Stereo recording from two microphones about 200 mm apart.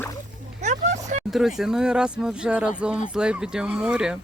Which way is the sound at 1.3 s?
Centre (ahead or behind).